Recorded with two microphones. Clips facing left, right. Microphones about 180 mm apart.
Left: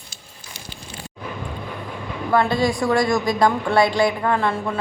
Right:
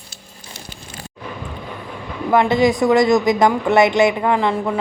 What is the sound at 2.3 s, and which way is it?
Speech, 20° right (ahead or behind).